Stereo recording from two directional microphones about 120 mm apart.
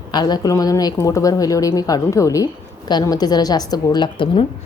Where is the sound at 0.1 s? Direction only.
35° left (ahead or behind).